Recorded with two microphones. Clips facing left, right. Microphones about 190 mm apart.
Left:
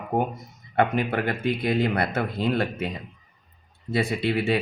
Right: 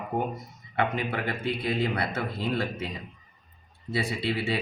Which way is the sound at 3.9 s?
50° left (ahead or behind).